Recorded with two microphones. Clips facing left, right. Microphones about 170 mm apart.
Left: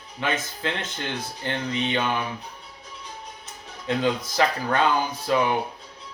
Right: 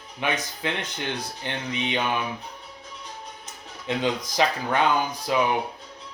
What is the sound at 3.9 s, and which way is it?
Speech, 20° right (ahead or behind).